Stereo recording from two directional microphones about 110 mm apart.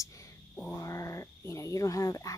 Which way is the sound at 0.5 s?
10° left (ahead or behind).